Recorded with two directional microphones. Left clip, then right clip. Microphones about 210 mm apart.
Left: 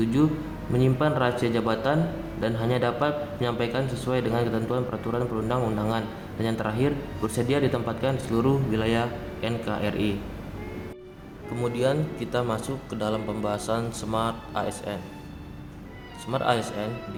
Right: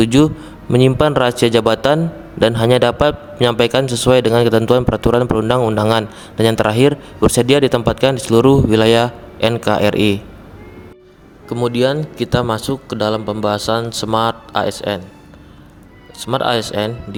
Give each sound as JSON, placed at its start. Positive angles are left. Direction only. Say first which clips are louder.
{"t": 0.0, "sound": "a man's voice", "louder": "right 11 dB", "side_deg": -50}
{"t": 11.4, "sound": "a man's voice", "louder": "right 10 dB", "side_deg": -45}
{"t": 16.2, "sound": "a man's voice", "louder": "right 8 dB", "side_deg": -45}